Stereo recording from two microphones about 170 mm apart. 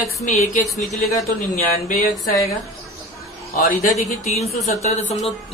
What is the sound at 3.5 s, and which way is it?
Speech, 55° left (ahead or behind).